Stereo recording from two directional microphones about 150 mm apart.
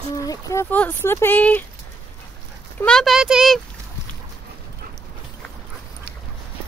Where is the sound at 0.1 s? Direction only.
25° left (ahead or behind).